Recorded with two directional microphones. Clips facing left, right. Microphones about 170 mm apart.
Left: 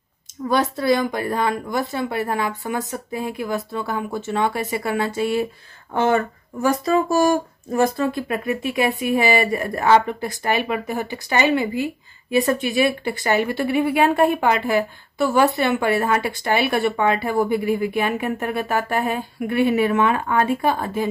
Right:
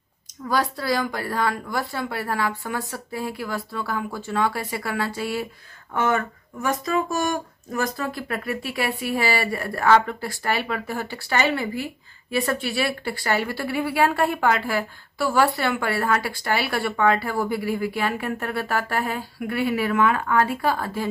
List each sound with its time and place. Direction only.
0.5 s speech: 25° left (ahead or behind)